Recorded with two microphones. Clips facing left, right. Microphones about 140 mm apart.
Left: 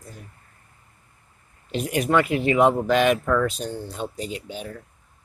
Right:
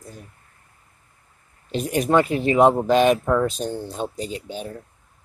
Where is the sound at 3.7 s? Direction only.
25° right (ahead or behind).